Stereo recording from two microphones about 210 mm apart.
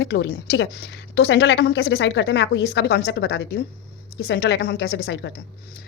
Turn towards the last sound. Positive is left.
turn(degrees=45)  # may be behind; listen again after turning